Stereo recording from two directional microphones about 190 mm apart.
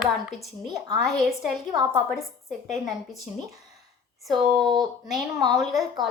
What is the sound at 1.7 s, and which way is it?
Speech, 20° right (ahead or behind).